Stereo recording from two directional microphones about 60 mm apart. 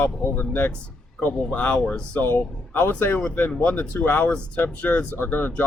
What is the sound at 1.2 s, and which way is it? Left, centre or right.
Speech, left.